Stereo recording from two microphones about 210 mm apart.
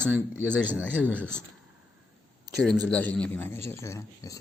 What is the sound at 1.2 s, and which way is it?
Speech, 5° left (ahead or behind).